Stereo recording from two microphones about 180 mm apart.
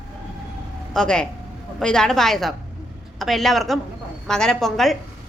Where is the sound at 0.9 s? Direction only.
5° left (ahead or behind).